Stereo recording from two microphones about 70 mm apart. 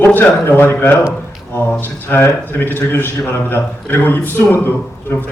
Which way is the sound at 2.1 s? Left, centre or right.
Left.